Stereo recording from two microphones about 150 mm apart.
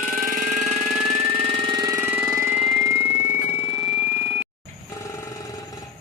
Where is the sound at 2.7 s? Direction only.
10° left (ahead or behind).